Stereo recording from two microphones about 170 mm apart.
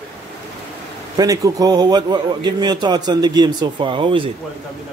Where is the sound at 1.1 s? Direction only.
20° right (ahead or behind).